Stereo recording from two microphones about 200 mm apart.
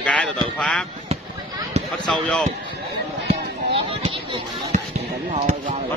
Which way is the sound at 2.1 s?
5° left (ahead or behind).